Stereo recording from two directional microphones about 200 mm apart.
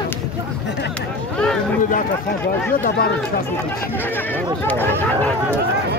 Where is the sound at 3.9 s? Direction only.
10° left (ahead or behind).